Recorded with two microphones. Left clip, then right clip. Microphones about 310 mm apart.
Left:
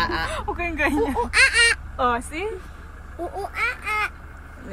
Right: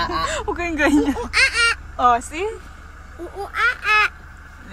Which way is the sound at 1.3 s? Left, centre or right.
Left.